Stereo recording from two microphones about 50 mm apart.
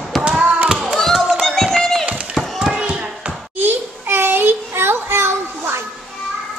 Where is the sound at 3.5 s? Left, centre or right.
Right.